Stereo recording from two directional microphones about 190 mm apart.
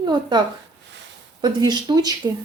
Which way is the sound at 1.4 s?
20° right (ahead or behind).